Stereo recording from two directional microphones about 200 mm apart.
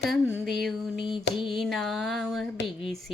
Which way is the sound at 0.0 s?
5° right (ahead or behind).